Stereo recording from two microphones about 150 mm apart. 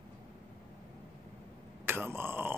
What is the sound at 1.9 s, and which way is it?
Speech, 15° right (ahead or behind).